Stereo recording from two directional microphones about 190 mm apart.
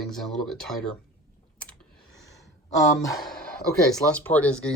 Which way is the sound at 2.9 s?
15° left (ahead or behind).